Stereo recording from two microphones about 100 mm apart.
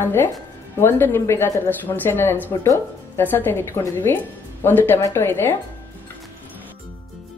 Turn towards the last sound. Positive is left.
turn(degrees=20)  # may be behind; listen again after turning